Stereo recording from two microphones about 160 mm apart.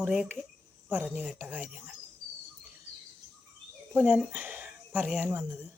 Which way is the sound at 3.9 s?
5° right (ahead or behind).